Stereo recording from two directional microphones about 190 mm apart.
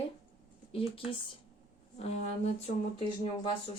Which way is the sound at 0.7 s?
30° left (ahead or behind).